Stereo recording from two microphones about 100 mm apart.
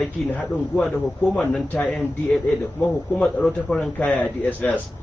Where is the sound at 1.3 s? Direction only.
5° left (ahead or behind).